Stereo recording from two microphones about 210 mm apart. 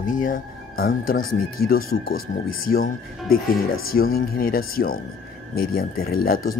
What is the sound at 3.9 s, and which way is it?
Speech, 45° left (ahead or behind).